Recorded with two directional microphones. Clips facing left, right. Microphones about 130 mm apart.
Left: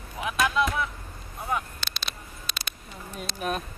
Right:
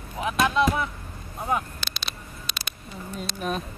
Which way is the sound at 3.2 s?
5° left (ahead or behind).